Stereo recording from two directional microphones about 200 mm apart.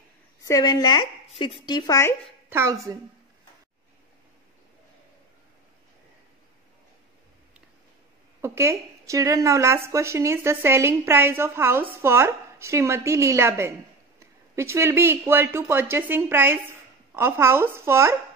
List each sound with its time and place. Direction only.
0.5 s a woman's voice: 20° left (ahead or behind)
2.5 s a woman's voice: 15° right (ahead or behind)
8.4 s a woman's voice: 15° right (ahead or behind)